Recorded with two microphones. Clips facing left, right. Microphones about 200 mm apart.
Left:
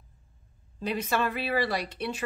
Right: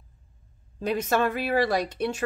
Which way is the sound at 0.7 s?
45° right (ahead or behind).